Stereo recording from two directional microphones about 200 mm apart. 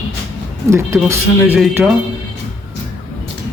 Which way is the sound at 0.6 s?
15° right (ahead or behind).